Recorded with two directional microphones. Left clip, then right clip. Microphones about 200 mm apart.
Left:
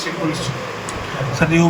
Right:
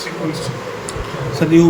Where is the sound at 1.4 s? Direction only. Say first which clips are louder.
Right 4 dB; 10° right (ahead or behind).